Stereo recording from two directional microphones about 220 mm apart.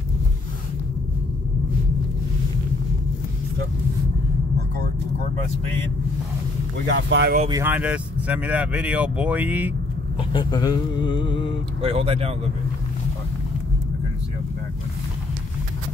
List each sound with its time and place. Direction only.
7.1 s speech: 50° right (ahead or behind)
7.4 s speech: 10° right (ahead or behind)
10.3 s speech: 20° left (ahead or behind)
11.8 s speech: 25° right (ahead or behind)